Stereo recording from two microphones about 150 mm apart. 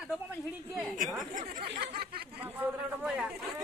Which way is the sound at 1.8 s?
90° right.